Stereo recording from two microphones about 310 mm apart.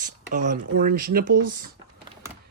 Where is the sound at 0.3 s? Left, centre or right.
Right.